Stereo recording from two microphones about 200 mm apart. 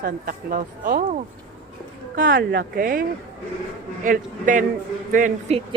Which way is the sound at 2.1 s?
45° right (ahead or behind).